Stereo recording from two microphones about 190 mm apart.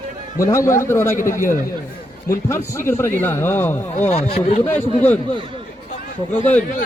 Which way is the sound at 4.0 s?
35° left (ahead or behind).